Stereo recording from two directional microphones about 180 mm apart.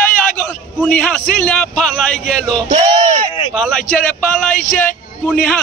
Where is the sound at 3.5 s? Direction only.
5° left (ahead or behind).